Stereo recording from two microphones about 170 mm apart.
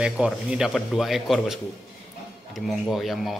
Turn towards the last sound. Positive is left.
turn(degrees=0)  # may be behind; listen again after turning